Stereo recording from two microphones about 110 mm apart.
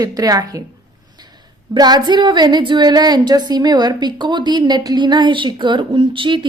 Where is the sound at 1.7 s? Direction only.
40° right (ahead or behind).